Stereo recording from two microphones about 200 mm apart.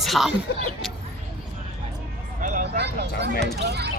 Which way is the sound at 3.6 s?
55° right (ahead or behind).